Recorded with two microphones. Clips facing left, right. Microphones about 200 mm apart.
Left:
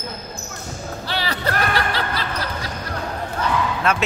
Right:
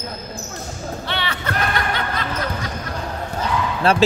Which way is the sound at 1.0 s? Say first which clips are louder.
Left 3 dB; 35° left (ahead or behind).